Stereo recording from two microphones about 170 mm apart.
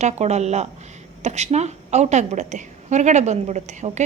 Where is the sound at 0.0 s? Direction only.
40° right (ahead or behind).